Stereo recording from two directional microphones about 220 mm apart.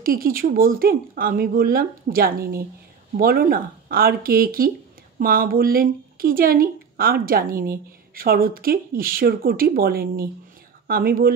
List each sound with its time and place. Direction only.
0.0 s speech: 40° right (ahead or behind)